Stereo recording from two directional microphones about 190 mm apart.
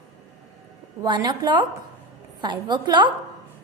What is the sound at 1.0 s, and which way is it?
A woman's voice, 25° right (ahead or behind).